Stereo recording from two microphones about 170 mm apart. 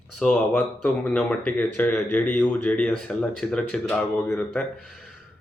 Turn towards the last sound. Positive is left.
turn(degrees=5)  # may be behind; listen again after turning